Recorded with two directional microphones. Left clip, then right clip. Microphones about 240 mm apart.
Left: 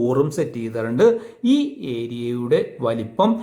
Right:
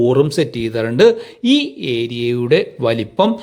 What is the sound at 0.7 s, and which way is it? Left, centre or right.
Speech, right.